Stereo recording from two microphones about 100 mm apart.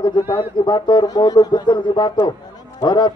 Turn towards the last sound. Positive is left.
turn(degrees=50)  # may be behind; listen again after turning